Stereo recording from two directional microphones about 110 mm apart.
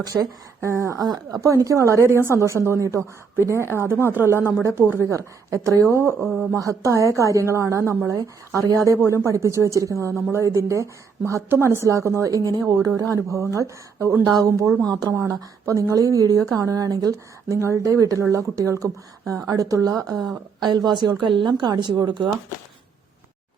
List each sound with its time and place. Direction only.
0.0 s a woman's voice: 35° right (ahead or behind)
3.6 s speech: 25° left (ahead or behind)
4.0 s a woman's voice: 20° right (ahead or behind); by 22.3 s 45° right (ahead or behind)